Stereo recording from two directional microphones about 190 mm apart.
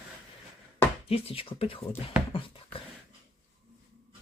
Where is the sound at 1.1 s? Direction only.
30° left (ahead or behind).